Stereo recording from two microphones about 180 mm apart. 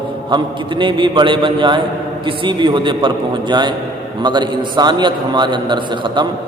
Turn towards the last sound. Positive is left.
turn(degrees=-25)  # may be behind; listen again after turning